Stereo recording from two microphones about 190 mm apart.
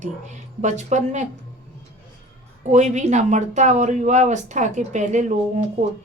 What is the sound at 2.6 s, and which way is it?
A woman's voice, 40° right (ahead or behind).